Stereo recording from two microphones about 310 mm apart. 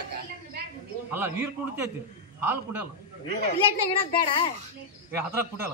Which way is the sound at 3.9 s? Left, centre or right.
Centre.